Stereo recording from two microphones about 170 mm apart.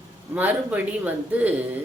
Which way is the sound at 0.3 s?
10° right (ahead or behind).